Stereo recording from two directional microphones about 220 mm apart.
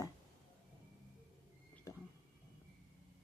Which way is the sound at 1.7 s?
15° left (ahead or behind).